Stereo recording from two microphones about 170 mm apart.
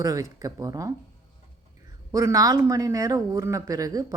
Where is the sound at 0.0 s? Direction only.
20° right (ahead or behind).